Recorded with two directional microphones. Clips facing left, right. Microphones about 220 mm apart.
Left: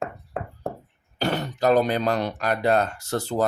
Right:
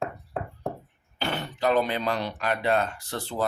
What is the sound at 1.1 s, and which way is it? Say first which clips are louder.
Speech: left 5 dB; 40° left (ahead or behind).